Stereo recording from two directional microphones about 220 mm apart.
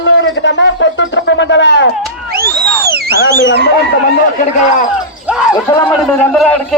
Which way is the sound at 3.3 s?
50° left (ahead or behind).